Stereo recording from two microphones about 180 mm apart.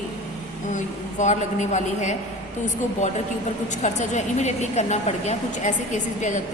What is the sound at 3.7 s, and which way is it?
Speech, 40° left (ahead or behind).